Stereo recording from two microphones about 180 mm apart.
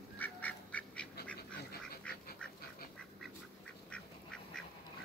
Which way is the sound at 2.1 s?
5° left (ahead or behind).